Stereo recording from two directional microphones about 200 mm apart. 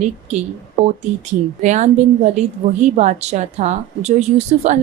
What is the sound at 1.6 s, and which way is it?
A woman's voice, 35° right (ahead or behind).